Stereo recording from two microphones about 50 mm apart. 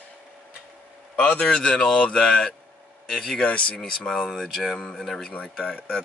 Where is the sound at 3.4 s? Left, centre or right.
Left.